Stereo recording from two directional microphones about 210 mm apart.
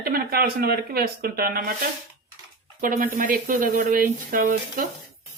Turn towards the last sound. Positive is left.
turn(degrees=-40)  # may be behind; listen again after turning